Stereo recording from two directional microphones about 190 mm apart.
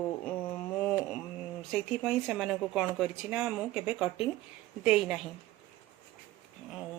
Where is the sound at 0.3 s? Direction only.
5° left (ahead or behind).